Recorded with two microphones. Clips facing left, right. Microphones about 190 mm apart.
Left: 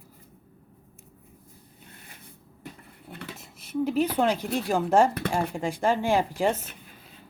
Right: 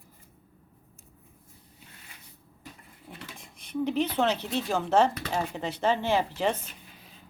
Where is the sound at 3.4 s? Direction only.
5° left (ahead or behind).